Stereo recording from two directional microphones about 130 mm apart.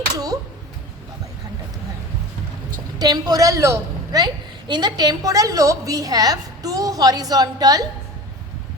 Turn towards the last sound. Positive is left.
turn(degrees=-30)  # may be behind; listen again after turning